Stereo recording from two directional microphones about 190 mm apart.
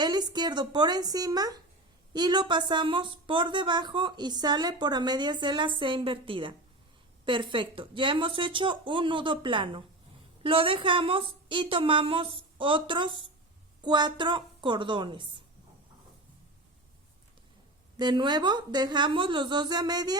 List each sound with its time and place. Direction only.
0.0 s speech: 20° right (ahead or behind)
17.9 s speech: 25° right (ahead or behind)